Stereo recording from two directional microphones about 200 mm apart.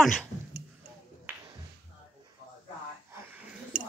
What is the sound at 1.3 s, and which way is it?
Music, 10° right (ahead or behind).